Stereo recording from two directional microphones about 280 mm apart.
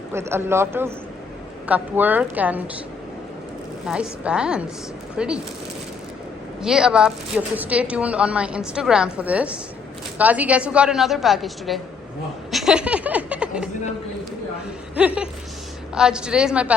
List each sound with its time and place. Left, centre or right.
0.1 s speech: centre
3.8 s speech: centre
6.6 s speech: centre
12.5 s a sound: centre
14.9 s speech: centre